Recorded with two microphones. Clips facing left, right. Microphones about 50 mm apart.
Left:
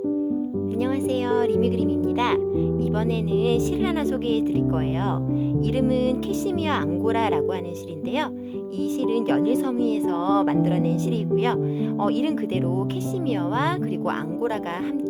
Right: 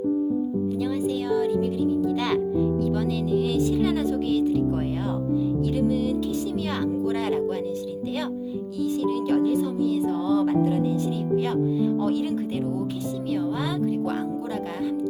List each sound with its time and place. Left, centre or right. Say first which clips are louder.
0.8 s speech: left 6 dB; left
2.1 s speech: left 2 dB; left
5.7 s speech: left 4 dB; left
9.0 s speech: left 2 dB; left
11.9 s speech: left 2 dB; left